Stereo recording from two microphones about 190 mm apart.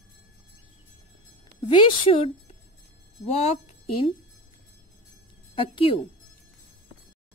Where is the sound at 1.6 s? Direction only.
25° left (ahead or behind).